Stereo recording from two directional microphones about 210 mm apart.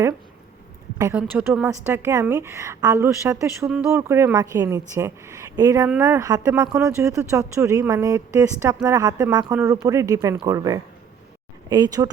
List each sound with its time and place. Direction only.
0.9 s a woman's voice: 10° right (ahead or behind)